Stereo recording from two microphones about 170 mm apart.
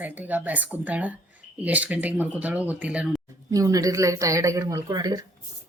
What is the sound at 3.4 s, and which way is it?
Speech, 20° right (ahead or behind).